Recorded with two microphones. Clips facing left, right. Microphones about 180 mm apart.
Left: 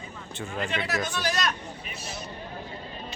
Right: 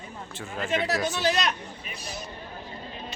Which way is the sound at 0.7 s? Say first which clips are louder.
Right 6 dB; 40° right (ahead or behind).